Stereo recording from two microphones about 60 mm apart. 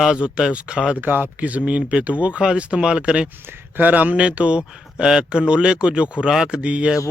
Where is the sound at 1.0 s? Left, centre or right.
Right.